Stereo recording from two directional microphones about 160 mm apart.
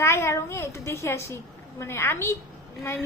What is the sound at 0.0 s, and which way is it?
A woman's voice, 15° left (ahead or behind).